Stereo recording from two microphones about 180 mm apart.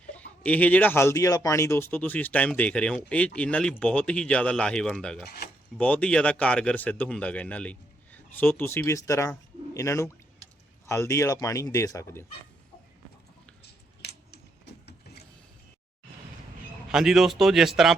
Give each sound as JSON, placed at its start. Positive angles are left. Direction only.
{"t": 0.1, "sound": "speech", "side_deg": 10}
{"t": 14.0, "sound": "scissors", "side_deg": 65}
{"t": 16.9, "sound": "speech", "side_deg": 0}